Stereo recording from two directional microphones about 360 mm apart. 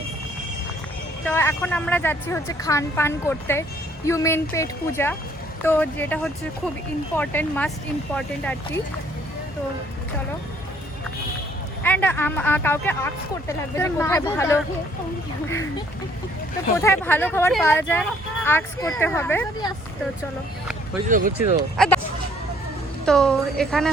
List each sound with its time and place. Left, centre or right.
1.2 s speech: centre
11.8 s speech: centre
16.7 s speech: centre
21.1 s speech: right
21.8 s speech: centre
23.0 s speech: centre